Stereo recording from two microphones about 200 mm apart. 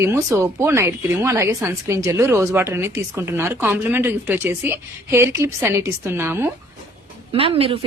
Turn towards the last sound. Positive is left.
turn(degrees=-30)  # may be behind; listen again after turning